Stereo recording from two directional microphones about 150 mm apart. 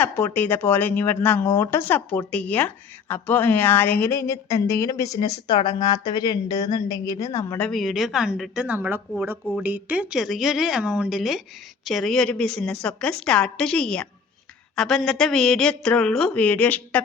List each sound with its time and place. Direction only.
0.3 s speech: 15° left (ahead or behind)
7.6 s a woman's voice: centre (ahead or behind)